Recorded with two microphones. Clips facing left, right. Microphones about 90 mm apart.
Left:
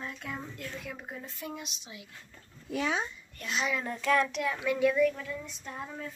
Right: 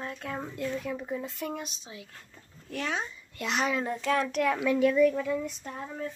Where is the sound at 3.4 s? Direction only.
70° right (ahead or behind).